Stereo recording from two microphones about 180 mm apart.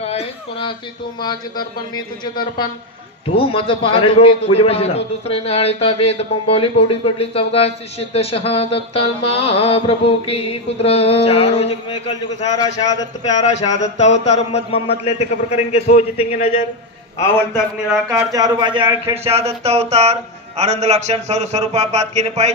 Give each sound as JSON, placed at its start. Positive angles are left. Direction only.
{"t": 0.0, "sound": "a sound", "side_deg": 35}
{"t": 2.0, "sound": "a man's voice", "side_deg": 25}
{"t": 13.5, "sound": "a man's voice", "side_deg": 40}
{"t": 18.1, "sound": "a man's voice", "side_deg": -20}